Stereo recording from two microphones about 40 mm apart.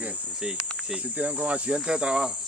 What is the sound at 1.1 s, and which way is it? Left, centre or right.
Speech, right.